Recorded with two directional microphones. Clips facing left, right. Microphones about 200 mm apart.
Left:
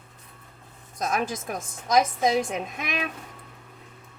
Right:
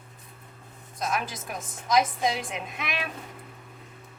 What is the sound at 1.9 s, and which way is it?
A woman's voice, 45° left (ahead or behind).